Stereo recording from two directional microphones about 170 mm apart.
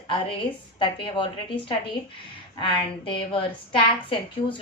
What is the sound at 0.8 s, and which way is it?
A woman's voice, 30° left (ahead or behind).